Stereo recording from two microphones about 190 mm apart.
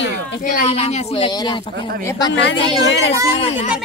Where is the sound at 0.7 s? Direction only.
35° left (ahead or behind).